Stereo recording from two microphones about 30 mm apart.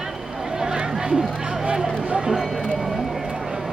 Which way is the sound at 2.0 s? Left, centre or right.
Right.